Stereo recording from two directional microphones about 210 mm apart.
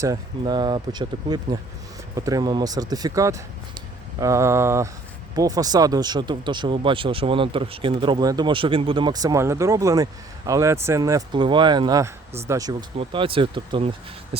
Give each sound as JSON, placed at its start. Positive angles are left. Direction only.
{"t": 0.0, "sound": "speech", "side_deg": -20}